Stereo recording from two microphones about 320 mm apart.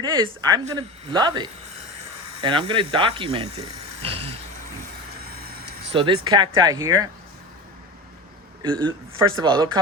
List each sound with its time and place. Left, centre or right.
0.0 s speech: centre
4.0 s vehicle: centre
5.9 s speech: centre
8.8 s speech: centre